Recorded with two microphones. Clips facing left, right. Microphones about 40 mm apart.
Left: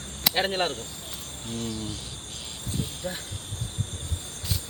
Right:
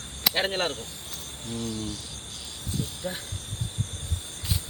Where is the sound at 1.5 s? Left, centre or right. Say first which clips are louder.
Even; left.